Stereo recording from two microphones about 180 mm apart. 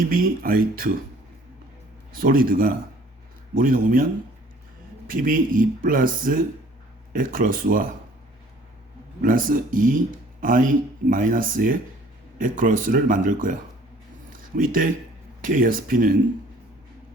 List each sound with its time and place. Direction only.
0.0 s speech: 50° right (ahead or behind)
2.1 s speech: 50° right (ahead or behind)
9.2 s speech: 50° right (ahead or behind)